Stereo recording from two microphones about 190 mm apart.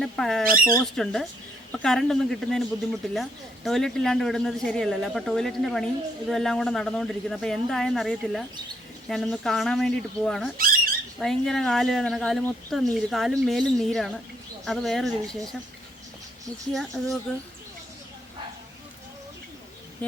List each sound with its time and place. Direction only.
0.0 s speech: centre (ahead or behind)
10.6 s squawk: 50° right (ahead or behind)
11.2 s speech: centre (ahead or behind)
16.7 s speech: centre (ahead or behind)
20.0 s speech: 10° left (ahead or behind)